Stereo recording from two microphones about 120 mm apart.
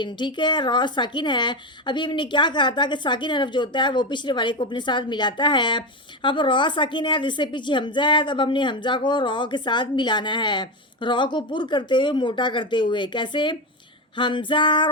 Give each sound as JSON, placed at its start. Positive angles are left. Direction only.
{"t": 0.0, "sound": "a woman's voice", "side_deg": 40}
{"t": 14.2, "sound": "female singing", "side_deg": 45}